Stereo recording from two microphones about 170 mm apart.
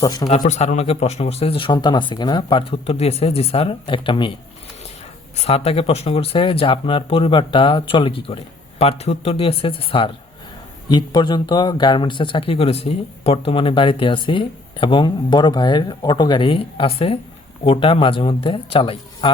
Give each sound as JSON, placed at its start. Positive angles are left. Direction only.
{"t": 0.0, "sound": "speech", "side_deg": 20}
{"t": 0.3, "sound": "speech", "side_deg": 45}
{"t": 5.4, "sound": "speech", "side_deg": 35}